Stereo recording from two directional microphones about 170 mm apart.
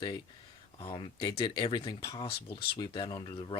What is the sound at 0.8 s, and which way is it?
Speech, 30° left (ahead or behind).